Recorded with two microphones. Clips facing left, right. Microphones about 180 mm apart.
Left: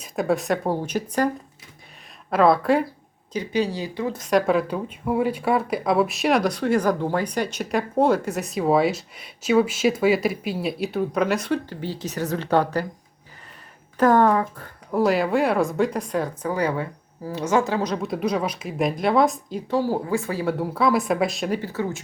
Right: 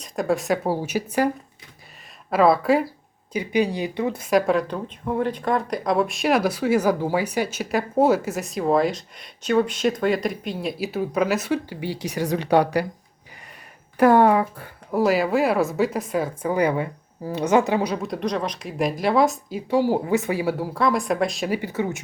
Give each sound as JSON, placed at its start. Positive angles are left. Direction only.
{"t": 0.0, "sound": "speech", "side_deg": 0}
{"t": 2.3, "sound": "speech", "side_deg": 0}
{"t": 3.3, "sound": "speech", "side_deg": -15}
{"t": 4.2, "sound": "speech", "side_deg": -5}
{"t": 14.0, "sound": "speech", "side_deg": -10}
{"t": 16.5, "sound": "speech", "side_deg": -15}
{"t": 17.9, "sound": "speech", "side_deg": 0}
{"t": 20.4, "sound": "speech", "side_deg": -5}
{"t": 21.6, "sound": "speech", "side_deg": -20}